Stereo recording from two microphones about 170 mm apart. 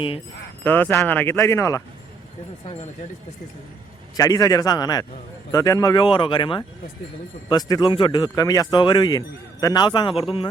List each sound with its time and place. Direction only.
0.6 s speech: 10° left (ahead or behind)
4.2 s speech: 20° left (ahead or behind)